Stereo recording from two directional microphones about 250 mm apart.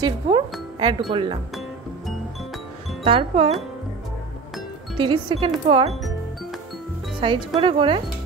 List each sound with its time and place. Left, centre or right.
0.0 s speech: centre
3.0 s speech: right
4.9 s speech: centre
7.2 s speech: centre